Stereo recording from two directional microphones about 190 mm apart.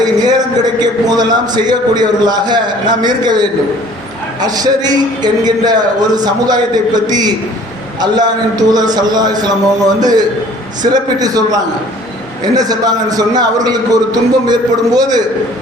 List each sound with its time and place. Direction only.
0.0 s a man's voice: 20° right (ahead or behind)